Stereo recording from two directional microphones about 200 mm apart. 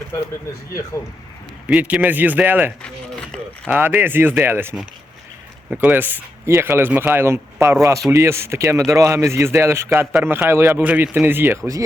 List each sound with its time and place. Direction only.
1.6 s speech: 5° right (ahead or behind)
2.8 s a sound: 5° left (ahead or behind)
3.7 s speech: 10° right (ahead or behind)